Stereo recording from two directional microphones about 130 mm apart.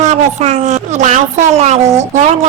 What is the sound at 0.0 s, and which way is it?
Speech, 60° right (ahead or behind).